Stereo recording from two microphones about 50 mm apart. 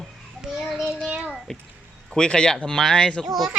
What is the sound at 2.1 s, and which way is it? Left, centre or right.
Speech, centre.